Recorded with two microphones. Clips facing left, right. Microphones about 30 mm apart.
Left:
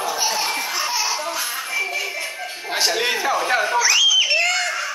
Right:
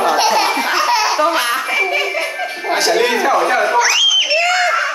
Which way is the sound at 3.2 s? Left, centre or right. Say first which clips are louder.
Right 7 dB; right.